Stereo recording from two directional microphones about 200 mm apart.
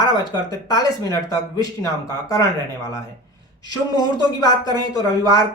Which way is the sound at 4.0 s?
20° left (ahead or behind).